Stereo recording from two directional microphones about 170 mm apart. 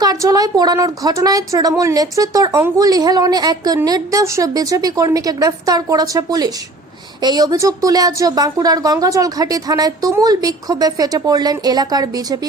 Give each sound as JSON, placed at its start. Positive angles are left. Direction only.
{"t": 0.0, "sound": "speech", "side_deg": -20}